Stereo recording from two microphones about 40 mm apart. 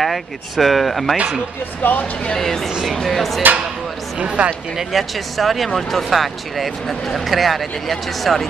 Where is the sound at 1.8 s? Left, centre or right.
Left.